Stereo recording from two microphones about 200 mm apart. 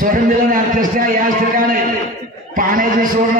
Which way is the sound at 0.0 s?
45° right (ahead or behind).